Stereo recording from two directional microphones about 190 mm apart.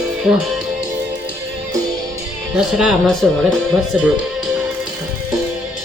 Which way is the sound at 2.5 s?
Centre (ahead or behind).